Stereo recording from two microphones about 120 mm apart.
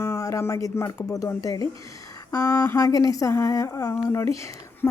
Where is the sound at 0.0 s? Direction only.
25° left (ahead or behind).